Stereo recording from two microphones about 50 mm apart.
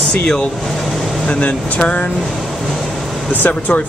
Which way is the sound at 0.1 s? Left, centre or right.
Centre.